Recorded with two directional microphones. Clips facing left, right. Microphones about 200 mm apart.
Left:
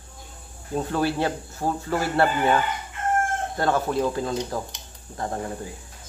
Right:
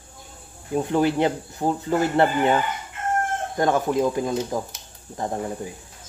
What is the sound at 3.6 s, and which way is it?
Speech, 15° right (ahead or behind).